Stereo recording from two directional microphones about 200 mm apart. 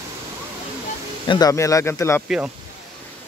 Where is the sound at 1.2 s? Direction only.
20° left (ahead or behind).